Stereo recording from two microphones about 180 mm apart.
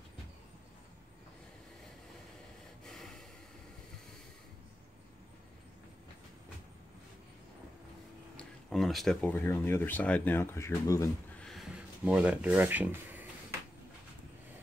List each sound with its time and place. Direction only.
2.8 s snort: centre (ahead or behind)
8.4 s speech: centre (ahead or behind); by 11.1 s 15° left (ahead or behind)
11.3 s a sound: centre (ahead or behind)